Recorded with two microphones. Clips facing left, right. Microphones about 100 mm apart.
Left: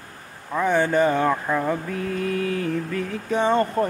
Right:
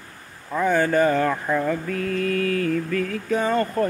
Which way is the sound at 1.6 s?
20° left (ahead or behind).